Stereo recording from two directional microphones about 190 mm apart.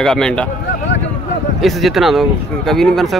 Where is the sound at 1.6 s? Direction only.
Centre (ahead or behind).